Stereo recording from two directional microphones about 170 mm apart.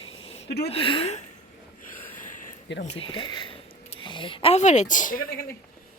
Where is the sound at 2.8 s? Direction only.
35° left (ahead or behind); by 5.2 s 50° left (ahead or behind).